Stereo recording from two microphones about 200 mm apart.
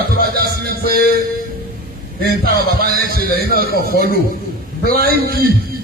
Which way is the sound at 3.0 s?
50° right (ahead or behind).